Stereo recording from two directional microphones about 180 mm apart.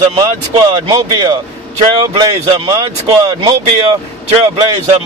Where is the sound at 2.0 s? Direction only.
20° right (ahead or behind).